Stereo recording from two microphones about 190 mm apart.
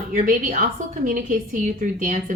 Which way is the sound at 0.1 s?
45° right (ahead or behind).